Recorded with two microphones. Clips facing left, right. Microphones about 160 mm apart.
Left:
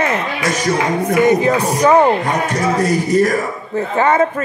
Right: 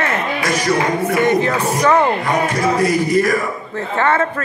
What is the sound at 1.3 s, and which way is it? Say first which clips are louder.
Speech: left 2 dB; 15° left (ahead or behind).